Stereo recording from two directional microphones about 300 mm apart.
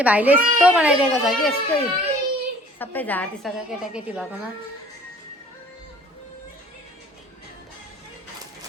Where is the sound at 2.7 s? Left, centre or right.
Centre.